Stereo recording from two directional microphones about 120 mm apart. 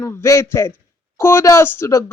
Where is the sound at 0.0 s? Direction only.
20° left (ahead or behind).